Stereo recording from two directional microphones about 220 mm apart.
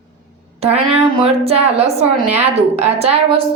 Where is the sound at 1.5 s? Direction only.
25° right (ahead or behind).